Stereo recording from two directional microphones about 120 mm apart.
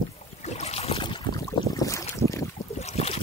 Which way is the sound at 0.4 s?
65° left (ahead or behind).